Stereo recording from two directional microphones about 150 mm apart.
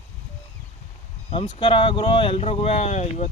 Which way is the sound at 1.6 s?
35° left (ahead or behind).